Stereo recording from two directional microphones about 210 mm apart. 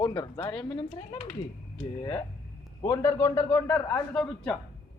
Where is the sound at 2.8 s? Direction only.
15° left (ahead or behind).